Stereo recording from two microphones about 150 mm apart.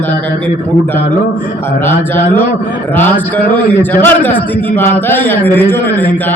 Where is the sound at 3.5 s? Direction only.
10° left (ahead or behind).